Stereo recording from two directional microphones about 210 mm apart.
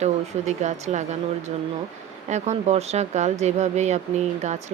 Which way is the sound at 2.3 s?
35° right (ahead or behind).